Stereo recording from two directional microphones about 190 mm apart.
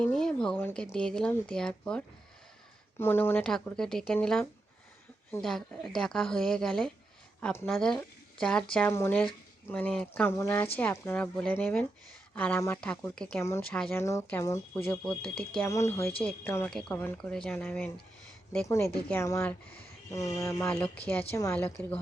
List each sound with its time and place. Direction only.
0.0 s speech: 5° left (ahead or behind)
13.7 s speech: 5° left (ahead or behind)
14.0 s speech: 15° left (ahead or behind)
19.0 s speech: 10° left (ahead or behind)